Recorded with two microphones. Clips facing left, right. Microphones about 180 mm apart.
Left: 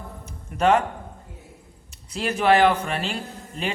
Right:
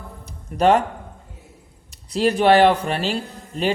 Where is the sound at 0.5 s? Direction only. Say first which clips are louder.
Right 3 dB; 35° right (ahead or behind).